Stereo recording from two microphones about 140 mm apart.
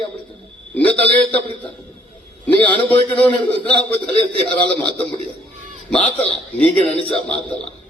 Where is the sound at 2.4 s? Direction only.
10° left (ahead or behind).